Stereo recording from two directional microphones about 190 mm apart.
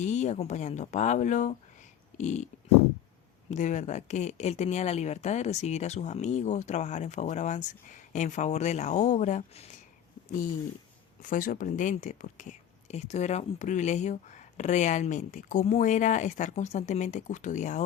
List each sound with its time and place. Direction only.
0.0 s speech: 40° left (ahead or behind)
2.1 s a sound: 40° left (ahead or behind)
3.5 s speech: 40° left (ahead or behind)
11.2 s speech: 45° left (ahead or behind)